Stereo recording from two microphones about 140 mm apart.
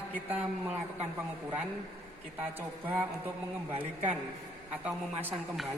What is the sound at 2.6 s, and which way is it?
Speech, 15° right (ahead or behind).